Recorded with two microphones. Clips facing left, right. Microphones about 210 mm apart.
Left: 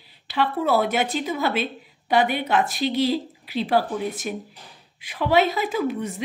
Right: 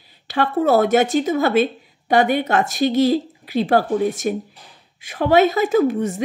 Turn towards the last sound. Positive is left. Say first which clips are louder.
# right 8 dB
turn(degrees=-45)  # may be behind; listen again after turning